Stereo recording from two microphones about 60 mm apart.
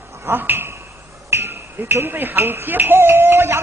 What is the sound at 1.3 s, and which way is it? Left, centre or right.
Speech, right.